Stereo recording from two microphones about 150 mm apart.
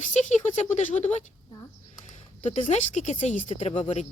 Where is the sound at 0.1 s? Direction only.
55° left (ahead or behind).